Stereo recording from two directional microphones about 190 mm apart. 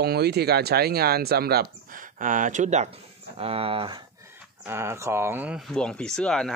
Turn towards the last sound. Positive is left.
turn(degrees=5)  # may be behind; listen again after turning